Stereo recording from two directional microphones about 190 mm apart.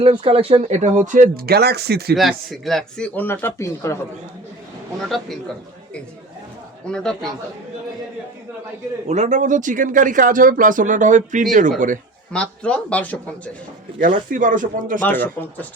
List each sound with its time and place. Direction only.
0.0 s speech: 30° right (ahead or behind); by 2.1 s 55° right (ahead or behind)
2.1 s speech: centre (ahead or behind)
5.0 s speech: centre (ahead or behind)
6.8 s speech: 5° left (ahead or behind)
9.0 s a man's voice: 35° right (ahead or behind)
12.3 s speech: 5° left (ahead or behind)
14.0 s a man's voice: 45° right (ahead or behind)
15.0 s speech: 10° left (ahead or behind)